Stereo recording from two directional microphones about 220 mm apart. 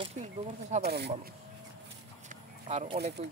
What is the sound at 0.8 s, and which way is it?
Speech, 50° right (ahead or behind).